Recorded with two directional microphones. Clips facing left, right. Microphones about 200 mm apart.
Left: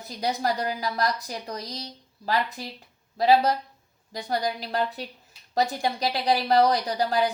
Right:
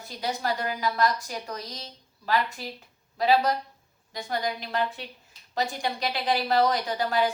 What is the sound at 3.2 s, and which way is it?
A woman's voice, 35° left (ahead or behind).